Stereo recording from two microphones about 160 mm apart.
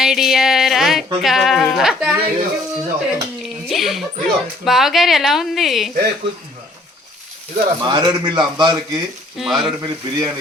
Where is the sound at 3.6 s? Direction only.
Centre (ahead or behind).